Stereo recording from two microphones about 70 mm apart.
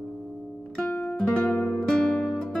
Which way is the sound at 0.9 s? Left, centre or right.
Left.